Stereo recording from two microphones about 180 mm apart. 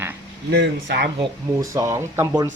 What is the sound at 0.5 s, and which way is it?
Speech, 70° right (ahead or behind).